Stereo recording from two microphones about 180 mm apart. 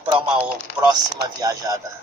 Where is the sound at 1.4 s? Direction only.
20° right (ahead or behind).